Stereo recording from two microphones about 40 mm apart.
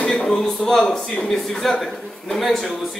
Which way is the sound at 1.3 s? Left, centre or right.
Centre.